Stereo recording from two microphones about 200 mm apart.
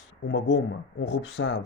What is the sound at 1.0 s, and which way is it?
Speech, 60° left (ahead or behind).